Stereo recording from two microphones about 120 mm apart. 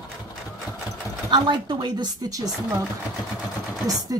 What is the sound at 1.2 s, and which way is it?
Speech, 40° right (ahead or behind).